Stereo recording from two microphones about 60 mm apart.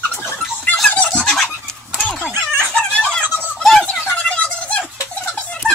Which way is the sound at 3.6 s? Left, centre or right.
Centre.